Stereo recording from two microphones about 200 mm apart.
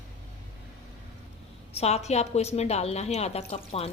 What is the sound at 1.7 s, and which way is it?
A woman's voice, 30° left (ahead or behind).